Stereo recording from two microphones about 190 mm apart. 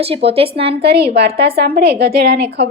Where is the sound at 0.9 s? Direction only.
55° right (ahead or behind).